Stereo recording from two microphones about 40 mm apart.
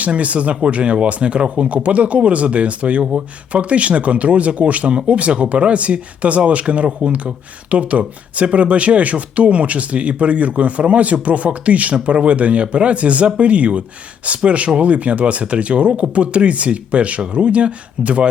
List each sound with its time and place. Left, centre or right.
0.0 s speech: right